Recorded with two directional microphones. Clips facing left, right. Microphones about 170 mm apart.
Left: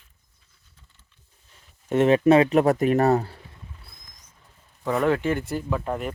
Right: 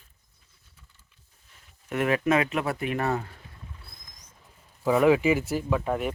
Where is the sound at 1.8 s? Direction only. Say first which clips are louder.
Left 7 dB; 30° left (ahead or behind).